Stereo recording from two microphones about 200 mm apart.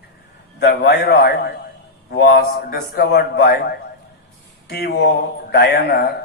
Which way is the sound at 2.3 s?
55° left (ahead or behind).